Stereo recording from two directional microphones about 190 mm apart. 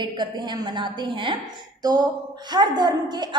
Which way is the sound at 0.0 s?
25° right (ahead or behind).